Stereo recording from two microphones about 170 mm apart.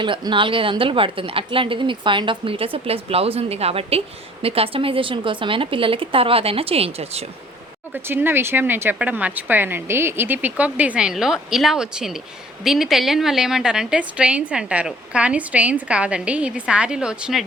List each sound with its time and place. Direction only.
0.0 s a woman's voice: 30° right (ahead or behind)
7.9 s a woman's voice: 10° right (ahead or behind)